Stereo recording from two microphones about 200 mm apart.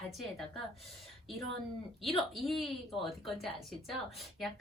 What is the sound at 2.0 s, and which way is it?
Speech, centre (ahead or behind).